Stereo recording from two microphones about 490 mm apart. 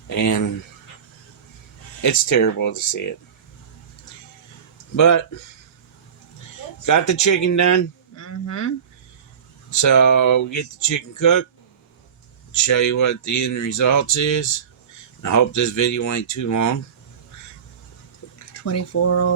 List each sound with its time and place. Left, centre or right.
0.1 s speech: left
2.0 s speech: left
4.9 s speech: left
7.1 s speech: left
9.8 s speech: left
12.6 s speech: left
18.5 s speech: left